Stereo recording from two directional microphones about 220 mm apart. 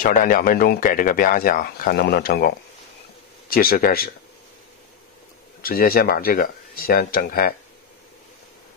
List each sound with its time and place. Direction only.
0.0 s a man's voice: 35° left (ahead or behind)
5.6 s speech: 40° left (ahead or behind)